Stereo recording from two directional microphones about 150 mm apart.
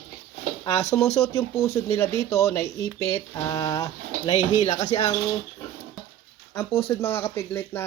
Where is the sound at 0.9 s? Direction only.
15° left (ahead or behind).